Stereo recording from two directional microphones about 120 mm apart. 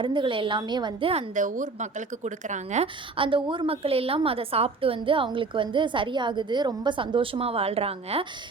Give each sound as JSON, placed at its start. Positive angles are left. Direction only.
{"t": 0.0, "sound": "a woman's voice", "side_deg": -45}
{"t": 1.1, "sound": "a woman's voice", "side_deg": -90}
{"t": 2.8, "sound": "a woman's voice", "side_deg": -45}